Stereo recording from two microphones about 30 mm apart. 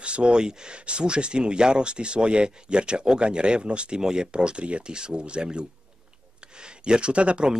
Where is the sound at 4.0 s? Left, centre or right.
Right.